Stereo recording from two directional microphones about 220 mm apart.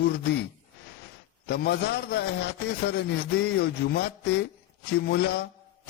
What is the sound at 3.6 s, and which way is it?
A man's voice, 45° left (ahead or behind).